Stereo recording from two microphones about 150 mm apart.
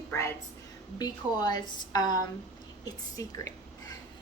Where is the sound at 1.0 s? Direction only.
30° left (ahead or behind).